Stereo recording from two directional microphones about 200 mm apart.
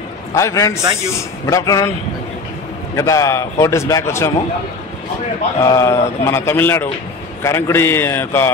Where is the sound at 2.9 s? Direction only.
15° left (ahead or behind).